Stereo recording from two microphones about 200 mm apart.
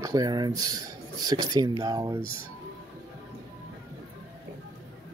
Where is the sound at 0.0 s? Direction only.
20° right (ahead or behind).